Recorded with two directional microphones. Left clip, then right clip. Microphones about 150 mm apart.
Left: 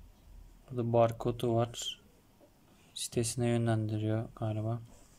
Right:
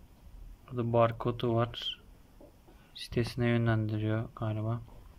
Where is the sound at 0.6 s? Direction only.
15° left (ahead or behind).